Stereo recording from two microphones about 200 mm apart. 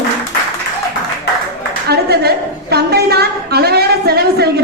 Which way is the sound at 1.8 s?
55° right (ahead or behind).